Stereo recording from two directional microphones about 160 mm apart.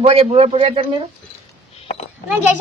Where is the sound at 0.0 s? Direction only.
35° right (ahead or behind).